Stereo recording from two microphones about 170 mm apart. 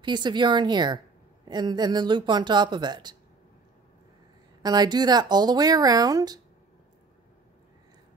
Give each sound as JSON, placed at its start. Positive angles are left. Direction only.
{"t": 0.0, "sound": "a woman's voice", "side_deg": -25}
{"t": 4.6, "sound": "a woman's voice", "side_deg": -25}